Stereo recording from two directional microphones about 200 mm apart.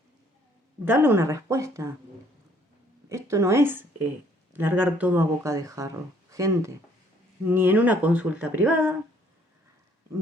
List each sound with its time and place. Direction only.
0.9 s a woman's voice: 10° right (ahead or behind)
3.1 s a woman's voice: 15° right (ahead or behind)